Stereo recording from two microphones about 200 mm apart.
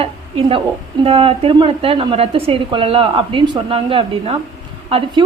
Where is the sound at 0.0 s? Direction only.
30° right (ahead or behind).